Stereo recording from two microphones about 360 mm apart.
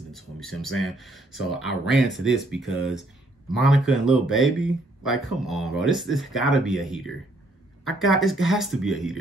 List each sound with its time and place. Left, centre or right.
0.1 s speech: centre